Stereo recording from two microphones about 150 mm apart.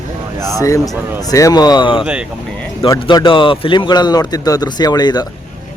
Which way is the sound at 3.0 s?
35° left (ahead or behind).